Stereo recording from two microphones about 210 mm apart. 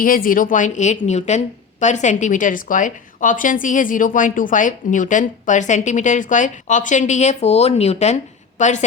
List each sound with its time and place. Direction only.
0.0 s a woman's voice: 40° left (ahead or behind)